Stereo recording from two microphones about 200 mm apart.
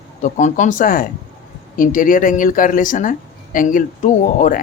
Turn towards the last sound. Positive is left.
turn(degrees=40)  # may be behind; listen again after turning